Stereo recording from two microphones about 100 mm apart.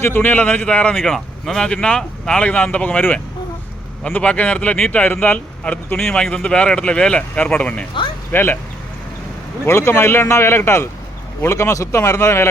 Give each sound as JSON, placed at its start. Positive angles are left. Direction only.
{"t": 0.0, "sound": "speech", "side_deg": 20}
{"t": 9.6, "sound": "speech", "side_deg": 25}